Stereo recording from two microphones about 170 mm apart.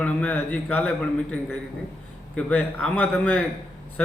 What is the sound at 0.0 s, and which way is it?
A man's voice, 10° left (ahead or behind).